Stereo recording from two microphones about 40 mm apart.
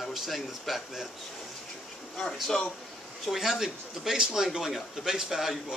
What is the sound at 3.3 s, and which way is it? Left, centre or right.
Speech, centre.